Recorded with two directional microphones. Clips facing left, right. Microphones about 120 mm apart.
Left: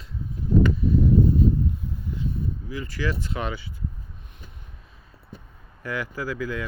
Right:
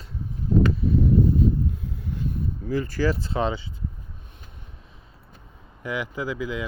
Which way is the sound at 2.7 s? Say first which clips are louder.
Right 7 dB; 40° right (ahead or behind).